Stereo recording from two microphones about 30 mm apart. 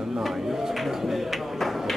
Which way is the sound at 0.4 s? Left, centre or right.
Centre.